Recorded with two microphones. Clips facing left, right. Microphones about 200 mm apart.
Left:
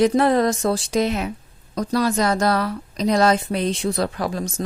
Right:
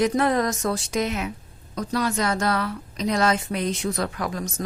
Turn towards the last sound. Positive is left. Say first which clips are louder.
# left 4 dB
turn(degrees=30)  # may be behind; listen again after turning